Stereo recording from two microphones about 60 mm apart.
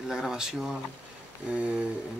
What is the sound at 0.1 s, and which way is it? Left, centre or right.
Speech, centre.